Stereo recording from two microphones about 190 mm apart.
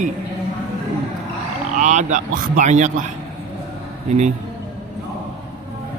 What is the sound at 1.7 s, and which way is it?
Speech, 40° right (ahead or behind).